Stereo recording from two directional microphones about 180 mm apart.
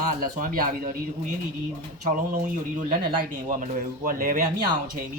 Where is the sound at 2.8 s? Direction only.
45° right (ahead or behind).